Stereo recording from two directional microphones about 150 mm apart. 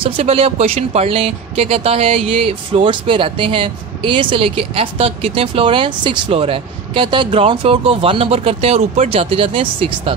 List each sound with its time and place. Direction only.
0.0 s speech: 40° right (ahead or behind)